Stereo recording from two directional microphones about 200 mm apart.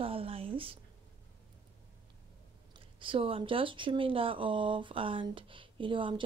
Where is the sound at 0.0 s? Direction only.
30° right (ahead or behind).